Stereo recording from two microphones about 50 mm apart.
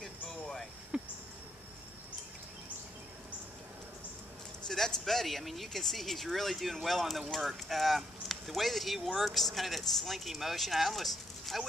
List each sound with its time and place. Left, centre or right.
0.0 s a sound: centre
0.9 s insect: centre
4.6 s speech: centre